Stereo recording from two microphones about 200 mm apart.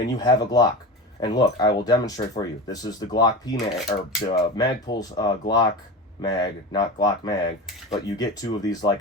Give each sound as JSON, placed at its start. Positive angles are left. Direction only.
{"t": 0.2, "sound": "speech", "side_deg": 20}